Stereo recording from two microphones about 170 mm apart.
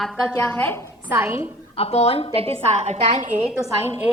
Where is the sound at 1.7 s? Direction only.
35° left (ahead or behind).